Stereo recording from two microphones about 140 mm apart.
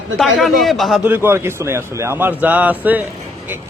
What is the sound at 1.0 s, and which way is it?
A man's voice, 15° right (ahead or behind).